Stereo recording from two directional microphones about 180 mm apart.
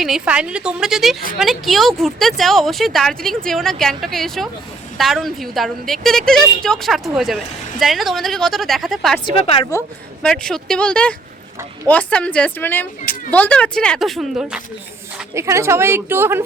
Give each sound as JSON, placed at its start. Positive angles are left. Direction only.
{"t": 0.0, "sound": "a woman's voice", "side_deg": -5}
{"t": 9.2, "sound": "a woman's voice", "side_deg": 30}
{"t": 10.2, "sound": "a woman's voice", "side_deg": 5}
{"t": 15.4, "sound": "a woman's voice", "side_deg": -15}